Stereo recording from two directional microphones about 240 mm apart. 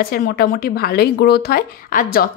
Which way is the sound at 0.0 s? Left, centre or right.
Left.